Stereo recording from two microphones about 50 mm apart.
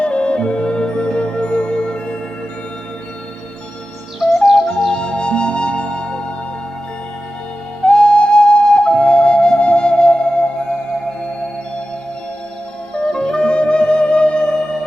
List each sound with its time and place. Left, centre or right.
0.0 s music: left
4.4 s music: centre
4.9 s music: centre
7.9 s flute: centre
12.9 s music: centre